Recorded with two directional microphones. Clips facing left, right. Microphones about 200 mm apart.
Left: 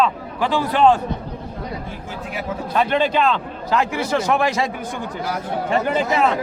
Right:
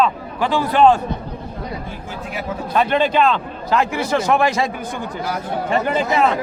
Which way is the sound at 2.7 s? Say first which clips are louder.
Right 2 dB; 55° right (ahead or behind).